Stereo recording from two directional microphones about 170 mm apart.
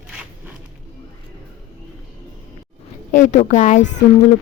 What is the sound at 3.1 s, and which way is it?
Speech, 45° left (ahead or behind).